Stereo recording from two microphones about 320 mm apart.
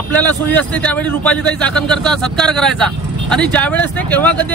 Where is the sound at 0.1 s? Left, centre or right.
Centre.